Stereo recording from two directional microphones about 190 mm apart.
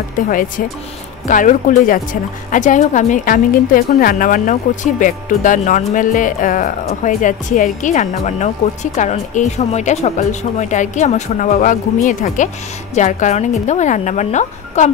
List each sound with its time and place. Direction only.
0.3 s a woman's voice: 45° left (ahead or behind)